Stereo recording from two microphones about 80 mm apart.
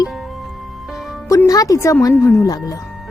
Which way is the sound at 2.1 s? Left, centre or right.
Left.